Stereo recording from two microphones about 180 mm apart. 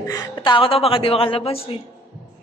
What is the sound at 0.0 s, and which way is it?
A woman's voice, 20° left (ahead or behind).